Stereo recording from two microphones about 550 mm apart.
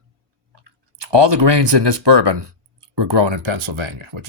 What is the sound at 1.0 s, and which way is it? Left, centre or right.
Speech, right.